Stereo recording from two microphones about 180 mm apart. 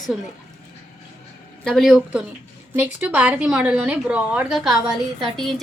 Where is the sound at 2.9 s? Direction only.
10° right (ahead or behind).